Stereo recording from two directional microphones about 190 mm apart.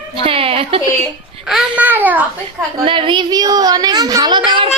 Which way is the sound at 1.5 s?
5° right (ahead or behind).